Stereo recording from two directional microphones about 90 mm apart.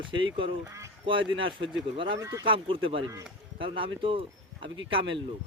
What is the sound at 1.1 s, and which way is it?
Speech, 70° right (ahead or behind).